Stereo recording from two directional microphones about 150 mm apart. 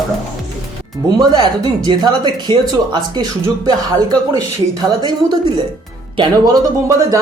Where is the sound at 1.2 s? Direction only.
30° right (ahead or behind).